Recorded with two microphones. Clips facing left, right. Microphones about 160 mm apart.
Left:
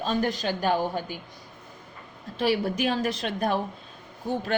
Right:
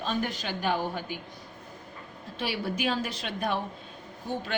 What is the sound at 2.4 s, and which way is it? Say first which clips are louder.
A woman's voice: left 6 dB; 45° left (ahead or behind).